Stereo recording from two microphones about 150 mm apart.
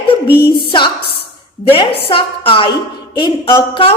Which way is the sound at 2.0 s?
35° left (ahead or behind).